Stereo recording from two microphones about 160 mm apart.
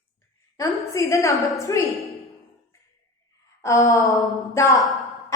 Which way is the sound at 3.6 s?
20° left (ahead or behind).